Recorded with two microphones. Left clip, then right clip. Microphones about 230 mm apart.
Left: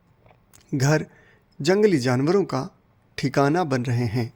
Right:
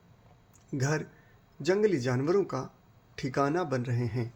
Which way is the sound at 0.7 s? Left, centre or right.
Left.